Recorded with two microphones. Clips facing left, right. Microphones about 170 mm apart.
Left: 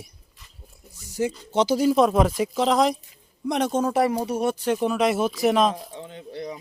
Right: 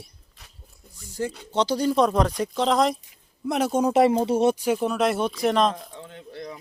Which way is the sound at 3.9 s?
25° right (ahead or behind).